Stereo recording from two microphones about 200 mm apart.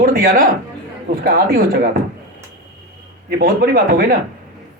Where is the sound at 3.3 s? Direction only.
45° right (ahead or behind).